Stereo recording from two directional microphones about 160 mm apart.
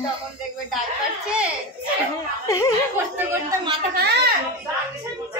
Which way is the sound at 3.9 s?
85° right.